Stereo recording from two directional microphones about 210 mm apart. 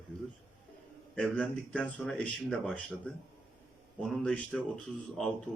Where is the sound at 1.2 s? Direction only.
5° left (ahead or behind).